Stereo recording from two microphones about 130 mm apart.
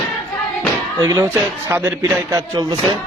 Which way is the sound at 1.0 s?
25° right (ahead or behind).